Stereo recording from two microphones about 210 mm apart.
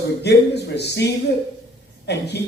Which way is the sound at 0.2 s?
50° left (ahead or behind).